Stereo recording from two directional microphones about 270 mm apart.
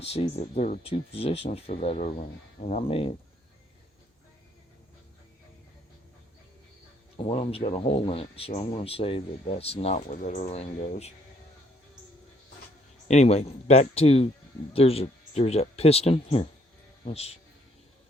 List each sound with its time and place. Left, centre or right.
0.0 s speech: left
7.2 s speech: left
13.1 s speech: left